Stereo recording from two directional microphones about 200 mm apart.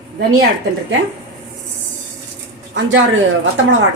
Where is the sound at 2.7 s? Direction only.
70° right (ahead or behind).